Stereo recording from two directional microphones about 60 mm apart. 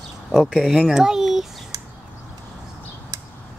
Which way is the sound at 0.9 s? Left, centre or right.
Centre.